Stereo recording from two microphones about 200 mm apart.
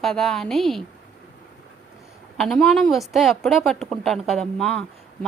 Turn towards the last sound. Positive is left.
turn(degrees=0)  # may be behind; listen again after turning